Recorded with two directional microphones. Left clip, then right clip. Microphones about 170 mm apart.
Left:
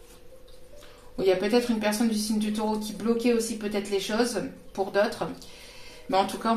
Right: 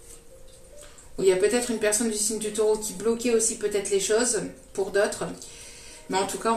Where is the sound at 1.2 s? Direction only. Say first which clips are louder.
Right 2 dB; 45° left (ahead or behind).